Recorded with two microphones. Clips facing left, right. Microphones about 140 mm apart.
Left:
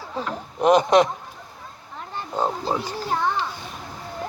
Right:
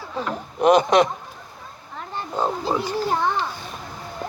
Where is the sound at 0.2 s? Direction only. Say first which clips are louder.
Right 2 dB; 35° left (ahead or behind).